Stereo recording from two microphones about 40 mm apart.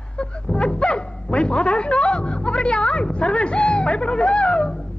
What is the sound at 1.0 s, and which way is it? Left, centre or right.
A woman's voice, left.